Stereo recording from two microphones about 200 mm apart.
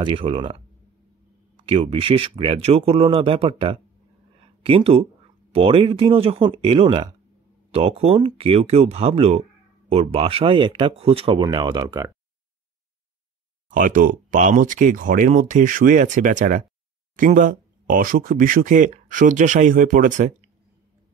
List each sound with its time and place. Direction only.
0.0 s speech: 25° right (ahead or behind)
1.7 s speech: 25° right (ahead or behind)
13.7 s speech: 40° right (ahead or behind)